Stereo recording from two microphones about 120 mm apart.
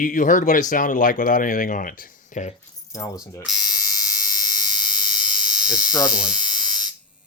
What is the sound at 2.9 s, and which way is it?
Speech, 30° left (ahead or behind).